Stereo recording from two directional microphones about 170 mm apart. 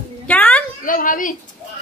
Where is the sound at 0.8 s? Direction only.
50° left (ahead or behind).